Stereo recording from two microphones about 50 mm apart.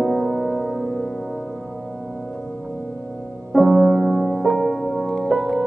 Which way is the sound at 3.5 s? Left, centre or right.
Centre.